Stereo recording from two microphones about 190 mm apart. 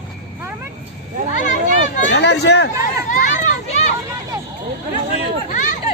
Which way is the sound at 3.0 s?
40° left (ahead or behind).